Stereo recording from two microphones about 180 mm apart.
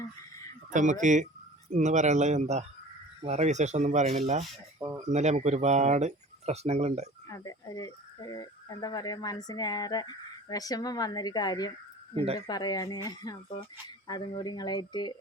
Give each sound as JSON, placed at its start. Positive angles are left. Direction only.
{"t": 0.7, "sound": "speech", "side_deg": -45}
{"t": 4.8, "sound": "a sound", "side_deg": -10}
{"t": 5.0, "sound": "speech", "side_deg": -40}
{"t": 7.3, "sound": "speech", "side_deg": 20}